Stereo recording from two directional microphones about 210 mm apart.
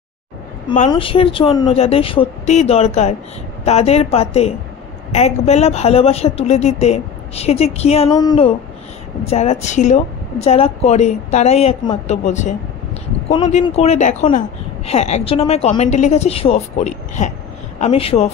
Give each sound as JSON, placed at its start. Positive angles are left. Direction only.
{"t": 0.8, "sound": "a woman's voice", "side_deg": 25}
{"t": 8.1, "sound": "a woman's voice", "side_deg": 20}